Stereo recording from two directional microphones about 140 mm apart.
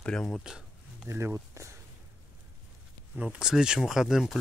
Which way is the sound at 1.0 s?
20° right (ahead or behind).